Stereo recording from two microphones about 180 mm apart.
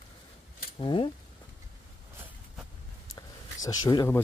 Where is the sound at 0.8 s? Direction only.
25° left (ahead or behind).